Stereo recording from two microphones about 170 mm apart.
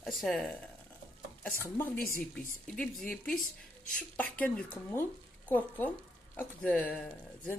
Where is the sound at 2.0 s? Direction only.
55° left (ahead or behind).